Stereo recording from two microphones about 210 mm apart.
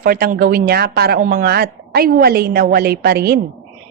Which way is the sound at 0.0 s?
45° right (ahead or behind).